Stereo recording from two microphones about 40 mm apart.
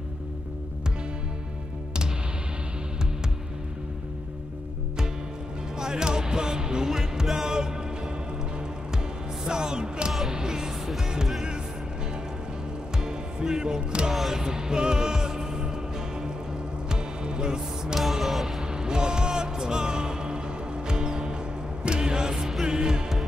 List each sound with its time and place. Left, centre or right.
5.8 s music: centre
9.5 s music: centre
13.0 s music: centre
16.9 s music: centre
17.9 s music: centre
18.6 s music: centre